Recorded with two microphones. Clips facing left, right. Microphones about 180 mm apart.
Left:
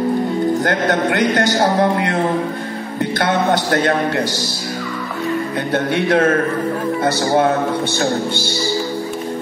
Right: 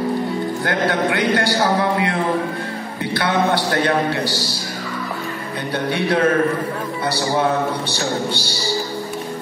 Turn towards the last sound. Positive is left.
turn(degrees=50)  # may be behind; listen again after turning